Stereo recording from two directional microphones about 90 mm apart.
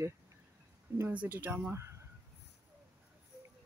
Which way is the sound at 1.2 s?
20° right (ahead or behind).